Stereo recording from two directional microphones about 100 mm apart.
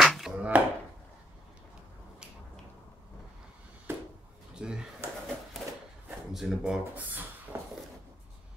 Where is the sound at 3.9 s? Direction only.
25° right (ahead or behind).